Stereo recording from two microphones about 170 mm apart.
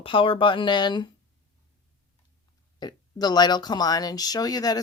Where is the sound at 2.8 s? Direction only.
25° left (ahead or behind).